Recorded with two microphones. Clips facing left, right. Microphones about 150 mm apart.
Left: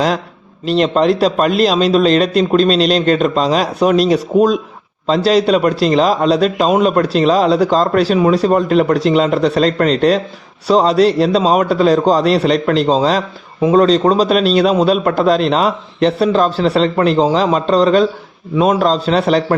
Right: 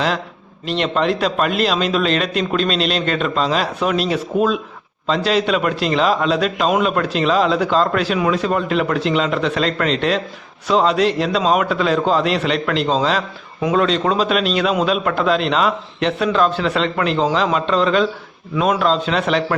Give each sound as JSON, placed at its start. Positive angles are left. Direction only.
{"t": 0.6, "sound": "a man's voice", "side_deg": 35}